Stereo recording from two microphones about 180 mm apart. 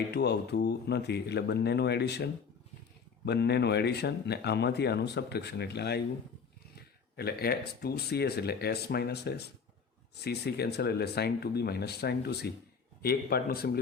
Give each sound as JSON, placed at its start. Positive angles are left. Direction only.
{"t": 0.1, "sound": "speech", "side_deg": 65}
{"t": 7.2, "sound": "speech", "side_deg": 60}